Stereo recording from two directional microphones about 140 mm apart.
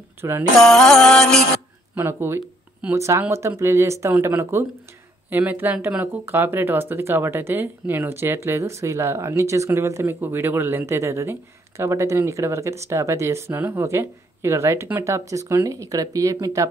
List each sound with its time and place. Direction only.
0.2 s music: 20° right (ahead or behind)
0.6 s music: 5° left (ahead or behind)
2.0 s speech: 15° right (ahead or behind)